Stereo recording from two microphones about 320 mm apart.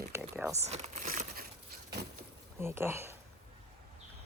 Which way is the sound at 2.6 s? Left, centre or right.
Centre.